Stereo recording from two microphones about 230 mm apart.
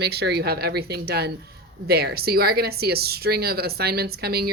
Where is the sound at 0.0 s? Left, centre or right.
Right.